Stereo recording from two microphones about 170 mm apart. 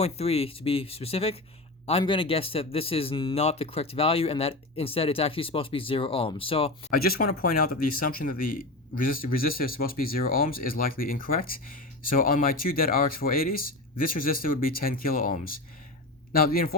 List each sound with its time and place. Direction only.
0.0 s speech: 35° left (ahead or behind)
6.9 s speech: 60° left (ahead or behind)